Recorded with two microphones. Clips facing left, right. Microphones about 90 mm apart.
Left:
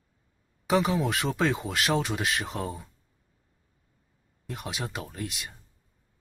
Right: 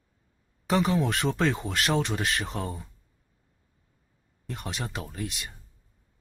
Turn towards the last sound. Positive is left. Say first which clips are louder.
# right 1 dB
turn(degrees=0)  # may be behind; listen again after turning